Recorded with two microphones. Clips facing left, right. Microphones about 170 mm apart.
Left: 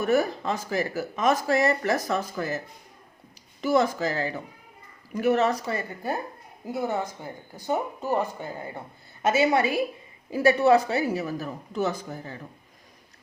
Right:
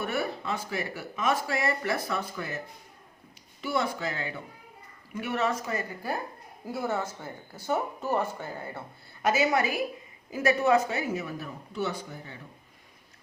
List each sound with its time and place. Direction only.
0.0 s speech: 40° left (ahead or behind)
3.6 s speech: 40° left (ahead or behind); by 8.8 s 15° left (ahead or behind)
9.2 s a woman's voice: 25° left (ahead or behind)